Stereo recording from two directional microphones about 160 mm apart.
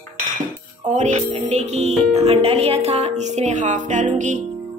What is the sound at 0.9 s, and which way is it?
Speech, 45° right (ahead or behind).